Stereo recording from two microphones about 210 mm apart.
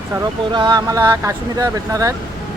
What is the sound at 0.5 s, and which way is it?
Speech, 20° right (ahead or behind).